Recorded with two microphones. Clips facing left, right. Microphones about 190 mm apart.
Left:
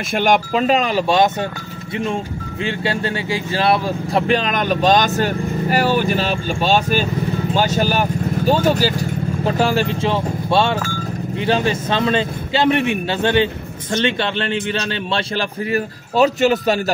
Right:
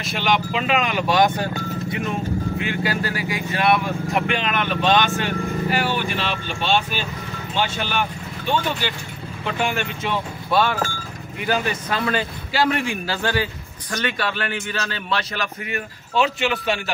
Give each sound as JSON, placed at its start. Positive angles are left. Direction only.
{"t": 0.1, "sound": "speech", "side_deg": 50}
{"t": 2.6, "sound": "a man's voice", "side_deg": 30}